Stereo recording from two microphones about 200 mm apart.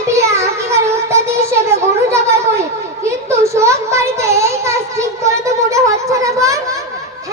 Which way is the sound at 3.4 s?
15° right (ahead or behind).